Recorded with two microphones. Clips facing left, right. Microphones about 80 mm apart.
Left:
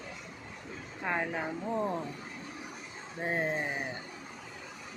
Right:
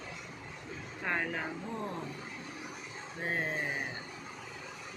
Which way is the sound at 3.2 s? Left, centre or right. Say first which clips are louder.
Left 3 dB; centre.